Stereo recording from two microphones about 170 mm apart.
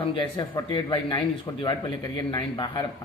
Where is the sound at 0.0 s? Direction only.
30° left (ahead or behind).